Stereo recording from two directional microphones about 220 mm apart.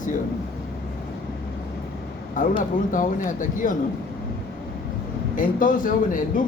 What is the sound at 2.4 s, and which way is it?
Speech, 35° left (ahead or behind).